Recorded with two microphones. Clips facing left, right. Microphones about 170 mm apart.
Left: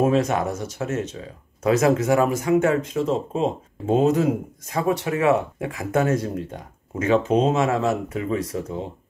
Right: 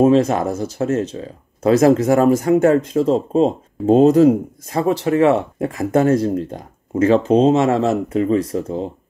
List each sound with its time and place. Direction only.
0.0 s speech: 30° right (ahead or behind)